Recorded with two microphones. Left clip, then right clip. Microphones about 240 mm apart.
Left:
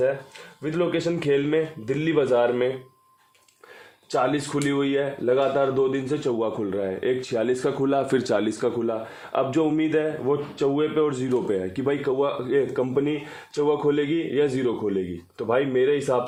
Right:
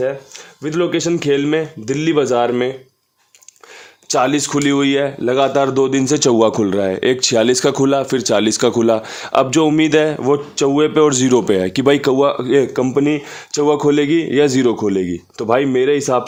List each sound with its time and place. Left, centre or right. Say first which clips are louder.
0.6 s speech: right 7 dB; right
4.1 s speech: right 8 dB; right